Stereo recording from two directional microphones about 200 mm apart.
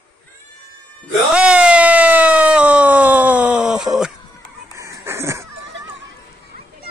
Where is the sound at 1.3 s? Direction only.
5° right (ahead or behind).